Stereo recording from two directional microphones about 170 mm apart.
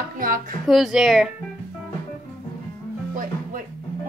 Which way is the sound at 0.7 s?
Centre (ahead or behind).